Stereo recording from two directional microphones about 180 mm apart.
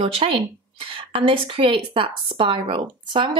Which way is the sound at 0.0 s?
30° right (ahead or behind).